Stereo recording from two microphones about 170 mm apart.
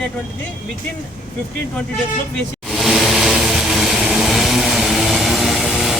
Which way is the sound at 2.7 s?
Centre (ahead or behind).